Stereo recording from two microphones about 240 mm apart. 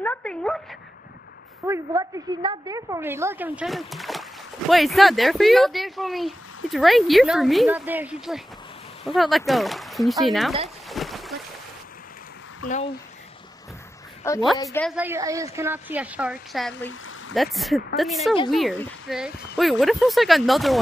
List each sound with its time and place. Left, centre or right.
0.0 s dog: centre
1.7 s a woman's voice: centre
10.9 s boat: centre
12.6 s speech: left
14.2 s a woman's voice: centre
14.9 s a woman's voice: centre